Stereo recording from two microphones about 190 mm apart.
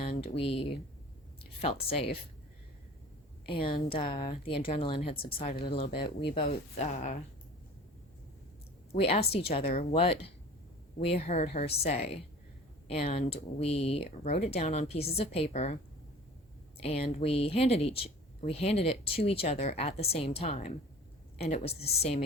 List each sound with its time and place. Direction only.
0.0 s speech: 30° left (ahead or behind)
3.8 s a woman's voice: 30° left (ahead or behind)
8.9 s speech: 30° left (ahead or behind)
16.8 s speech: 30° left (ahead or behind)